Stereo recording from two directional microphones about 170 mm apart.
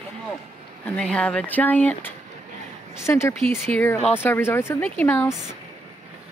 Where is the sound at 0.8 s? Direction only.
5° left (ahead or behind).